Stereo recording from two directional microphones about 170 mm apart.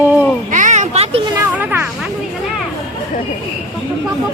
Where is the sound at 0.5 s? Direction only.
45° right (ahead or behind).